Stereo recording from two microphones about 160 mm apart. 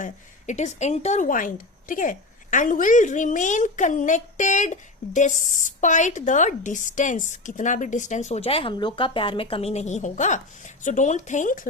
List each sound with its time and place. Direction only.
0.0 s speech: 50° left (ahead or behind)